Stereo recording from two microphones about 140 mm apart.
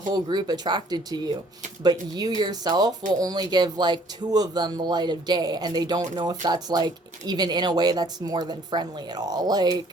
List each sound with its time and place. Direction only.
0.1 s speech: 30° right (ahead or behind)